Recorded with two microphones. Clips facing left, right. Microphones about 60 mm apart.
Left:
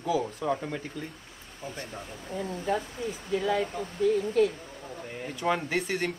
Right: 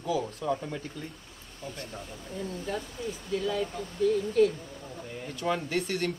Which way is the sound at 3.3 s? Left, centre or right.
Left.